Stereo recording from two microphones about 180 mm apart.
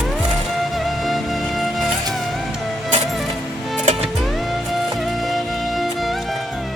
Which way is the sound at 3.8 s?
40° right (ahead or behind).